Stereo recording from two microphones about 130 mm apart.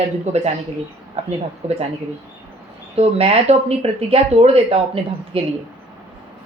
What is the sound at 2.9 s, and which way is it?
Speech, 55° right (ahead or behind).